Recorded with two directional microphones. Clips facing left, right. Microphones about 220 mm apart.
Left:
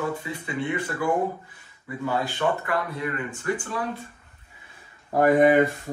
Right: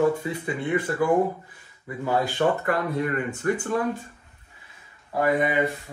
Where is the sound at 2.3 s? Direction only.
45° right (ahead or behind).